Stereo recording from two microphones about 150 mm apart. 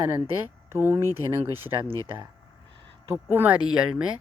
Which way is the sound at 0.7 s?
15° right (ahead or behind).